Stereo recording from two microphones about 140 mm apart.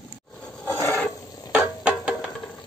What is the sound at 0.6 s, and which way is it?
Filing, 20° left (ahead or behind).